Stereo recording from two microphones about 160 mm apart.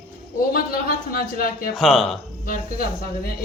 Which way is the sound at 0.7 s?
65° left (ahead or behind).